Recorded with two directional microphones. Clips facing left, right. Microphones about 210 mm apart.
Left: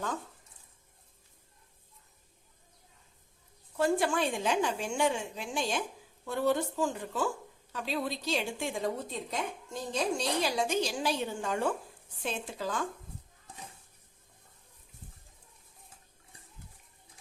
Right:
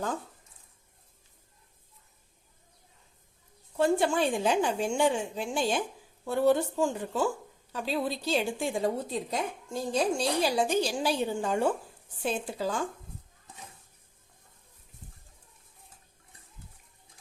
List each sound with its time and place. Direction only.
3.8 s a woman's voice: 25° right (ahead or behind)